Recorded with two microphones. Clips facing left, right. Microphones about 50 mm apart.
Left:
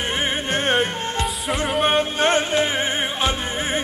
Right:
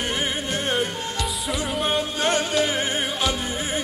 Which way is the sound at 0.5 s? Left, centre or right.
Left.